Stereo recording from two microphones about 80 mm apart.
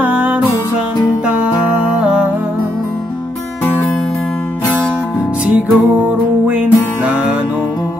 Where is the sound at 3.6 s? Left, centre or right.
Left.